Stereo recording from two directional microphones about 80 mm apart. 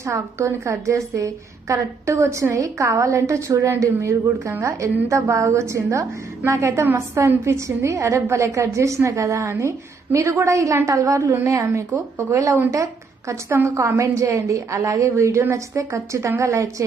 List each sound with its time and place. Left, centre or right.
0.0 s a woman's voice: right